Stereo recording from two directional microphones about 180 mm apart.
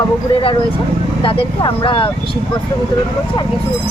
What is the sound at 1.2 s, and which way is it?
Speech, 30° left (ahead or behind).